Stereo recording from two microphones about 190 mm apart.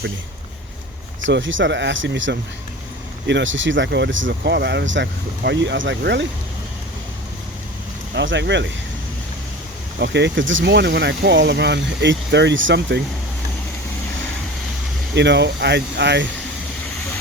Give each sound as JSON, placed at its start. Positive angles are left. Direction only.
{"t": 1.2, "sound": "speech", "side_deg": -80}
{"t": 8.1, "sound": "speech", "side_deg": -70}
{"t": 10.0, "sound": "speech", "side_deg": -65}
{"t": 15.1, "sound": "speech", "side_deg": -65}